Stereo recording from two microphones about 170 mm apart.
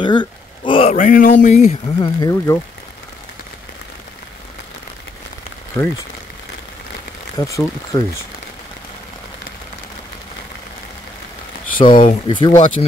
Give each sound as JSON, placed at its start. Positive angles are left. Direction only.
{"t": 0.0, "sound": "a sound", "side_deg": 25}
{"t": 0.9, "sound": "speech", "side_deg": 50}
{"t": 2.0, "sound": "speech", "side_deg": 25}
{"t": 5.8, "sound": "speech", "side_deg": 15}
{"t": 7.3, "sound": "speech", "side_deg": 20}
{"t": 11.9, "sound": "speech", "side_deg": 50}
{"t": 12.3, "sound": "speech", "side_deg": 30}